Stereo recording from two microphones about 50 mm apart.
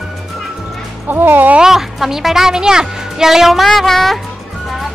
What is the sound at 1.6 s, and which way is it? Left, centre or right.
A woman's voice, centre.